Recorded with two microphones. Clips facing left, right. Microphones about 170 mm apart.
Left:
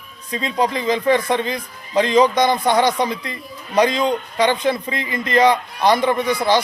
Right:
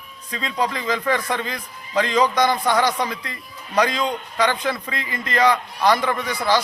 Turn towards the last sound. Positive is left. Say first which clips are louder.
# left 4 dB
turn(degrees=20)  # may be behind; listen again after turning